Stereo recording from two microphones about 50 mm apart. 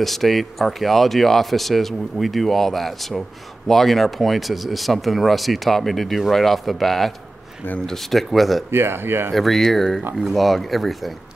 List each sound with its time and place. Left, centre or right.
0.0 s speech: centre
8.7 s speech: right
9.3 s speech: centre